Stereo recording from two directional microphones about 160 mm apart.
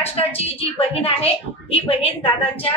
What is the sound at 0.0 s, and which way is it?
A woman's voice, 40° left (ahead or behind).